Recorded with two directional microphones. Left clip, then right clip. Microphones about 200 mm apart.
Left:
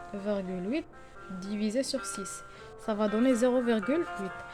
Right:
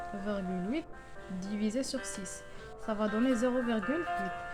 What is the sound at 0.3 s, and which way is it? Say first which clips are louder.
A woman's voice: left 5 dB; 25° left (ahead or behind).